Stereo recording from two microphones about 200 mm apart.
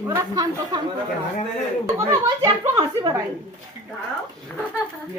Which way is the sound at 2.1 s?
15° right (ahead or behind).